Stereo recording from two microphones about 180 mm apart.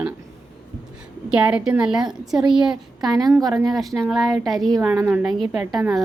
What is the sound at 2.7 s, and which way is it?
Speech, 20° right (ahead or behind).